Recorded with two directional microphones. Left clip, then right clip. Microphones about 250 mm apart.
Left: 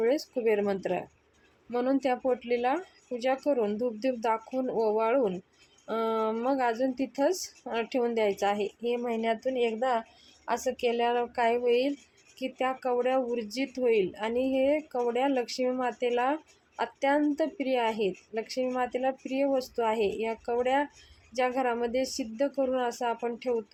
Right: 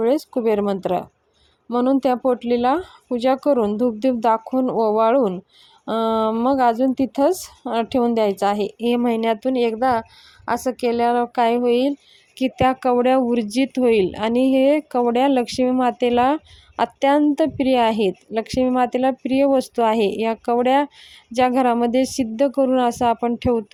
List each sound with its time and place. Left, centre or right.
0.0 s speech: right